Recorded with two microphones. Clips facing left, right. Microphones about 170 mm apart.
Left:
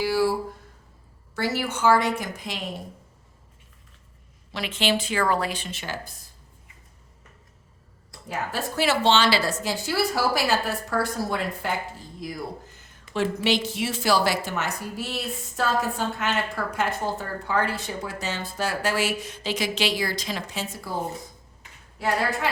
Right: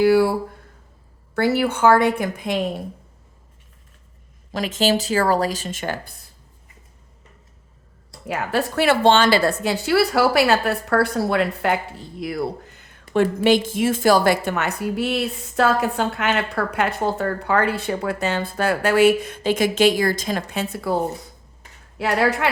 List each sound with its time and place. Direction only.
0.0 s a woman's voice: 60° right (ahead or behind)
1.4 s a woman's voice: 60° right (ahead or behind)
4.5 s speech: 40° right (ahead or behind)
8.3 s a woman's voice: 65° right (ahead or behind)
13.1 s a woman's voice: 50° right (ahead or behind); by 21.0 s 65° right (ahead or behind)
21.9 s a woman's voice: 75° right (ahead or behind)